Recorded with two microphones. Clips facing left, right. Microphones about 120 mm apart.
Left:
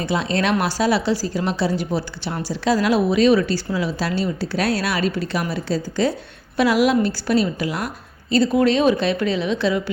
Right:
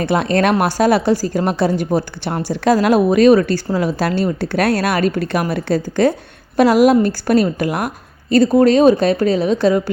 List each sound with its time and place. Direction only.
0.0 s speech: 55° right (ahead or behind)
6.6 s speech: 45° right (ahead or behind)